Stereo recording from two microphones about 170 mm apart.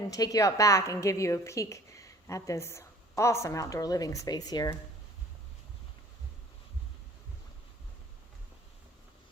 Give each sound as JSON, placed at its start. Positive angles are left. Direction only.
{"t": 0.1, "sound": "a woman's voice", "side_deg": 20}